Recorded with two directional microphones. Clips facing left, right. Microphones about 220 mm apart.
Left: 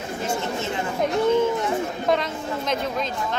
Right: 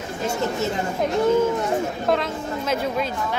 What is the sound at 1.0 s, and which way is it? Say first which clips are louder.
A woman's voice: right 1 dB; centre (ahead or behind).